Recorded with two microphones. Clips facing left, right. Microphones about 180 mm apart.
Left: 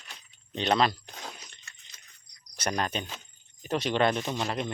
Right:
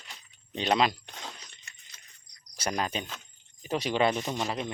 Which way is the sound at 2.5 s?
5° right (ahead or behind).